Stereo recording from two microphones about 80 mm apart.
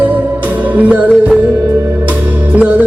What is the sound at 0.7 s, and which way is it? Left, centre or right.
Music, centre.